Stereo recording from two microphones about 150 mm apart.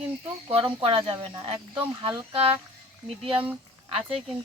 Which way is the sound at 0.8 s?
35° right (ahead or behind).